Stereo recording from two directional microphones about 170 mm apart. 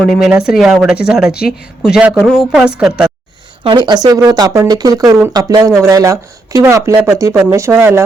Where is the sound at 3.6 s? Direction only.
25° right (ahead or behind).